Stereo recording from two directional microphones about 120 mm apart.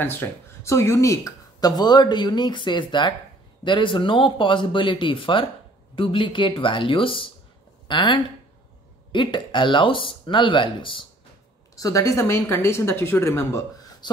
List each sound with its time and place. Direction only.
0.0 s speech: 20° left (ahead or behind); by 11.1 s 45° left (ahead or behind)
11.7 s speech: 30° left (ahead or behind)